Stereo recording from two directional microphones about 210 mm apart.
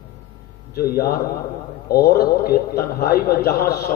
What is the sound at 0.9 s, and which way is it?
A man's voice, 45° left (ahead or behind).